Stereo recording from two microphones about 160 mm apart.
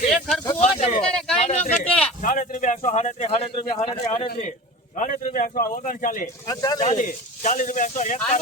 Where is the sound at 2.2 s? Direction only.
55° left (ahead or behind); by 4.3 s 40° left (ahead or behind).